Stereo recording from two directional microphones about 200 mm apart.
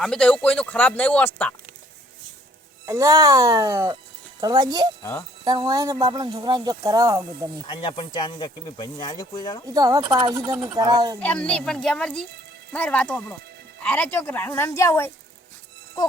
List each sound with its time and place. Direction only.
0.0 s speech: 5° left (ahead or behind)
2.8 s speech: 15° right (ahead or behind)
7.7 s speech: 25° left (ahead or behind)
9.6 s speech: 20° right (ahead or behind)
11.2 s a woman's voice: 5° left (ahead or behind)